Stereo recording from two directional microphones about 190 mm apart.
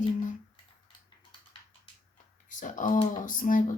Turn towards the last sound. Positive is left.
turn(degrees=45)  # may be behind; listen again after turning